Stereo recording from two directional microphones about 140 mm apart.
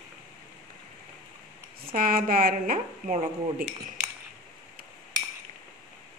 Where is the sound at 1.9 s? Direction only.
85° right.